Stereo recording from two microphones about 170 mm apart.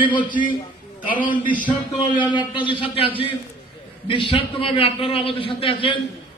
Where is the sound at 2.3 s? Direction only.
30° left (ahead or behind).